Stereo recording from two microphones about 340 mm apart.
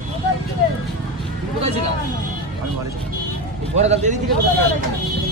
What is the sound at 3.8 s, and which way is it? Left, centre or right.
Speech, centre.